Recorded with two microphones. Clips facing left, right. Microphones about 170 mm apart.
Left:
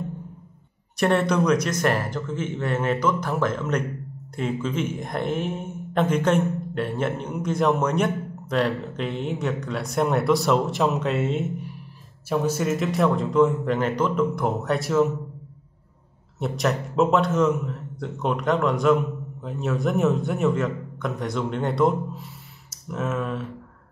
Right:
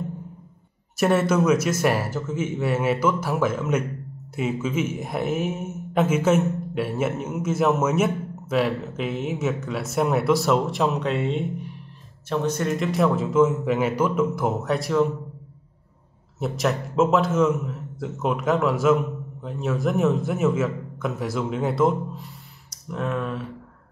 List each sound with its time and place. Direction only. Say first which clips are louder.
0.9 s speech: right 1 dB; 5° right (ahead or behind)
16.3 s a man's voice: even; centre (ahead or behind)